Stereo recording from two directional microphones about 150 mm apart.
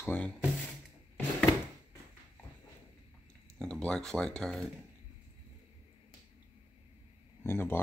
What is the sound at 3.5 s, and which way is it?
Speech, 5° left (ahead or behind).